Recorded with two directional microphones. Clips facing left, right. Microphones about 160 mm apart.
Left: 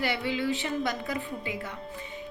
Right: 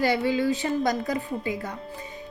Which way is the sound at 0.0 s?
40° right (ahead or behind).